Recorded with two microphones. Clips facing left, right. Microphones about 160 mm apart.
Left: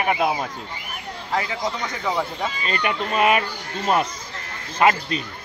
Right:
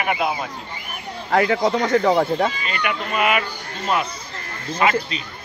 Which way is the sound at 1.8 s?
60° right (ahead or behind).